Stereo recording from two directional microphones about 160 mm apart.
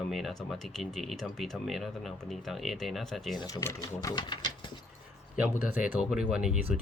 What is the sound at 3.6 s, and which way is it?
Speech, 20° left (ahead or behind).